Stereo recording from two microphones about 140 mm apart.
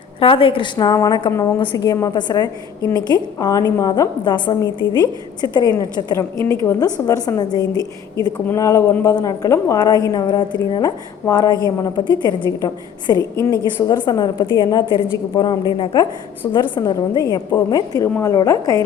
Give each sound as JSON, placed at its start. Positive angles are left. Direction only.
{"t": 0.2, "sound": "a woman's voice", "side_deg": 40}